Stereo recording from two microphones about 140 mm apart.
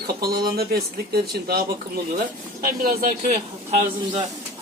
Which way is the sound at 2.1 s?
90° right.